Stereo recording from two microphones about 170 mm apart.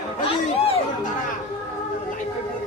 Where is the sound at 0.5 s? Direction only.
35° left (ahead or behind).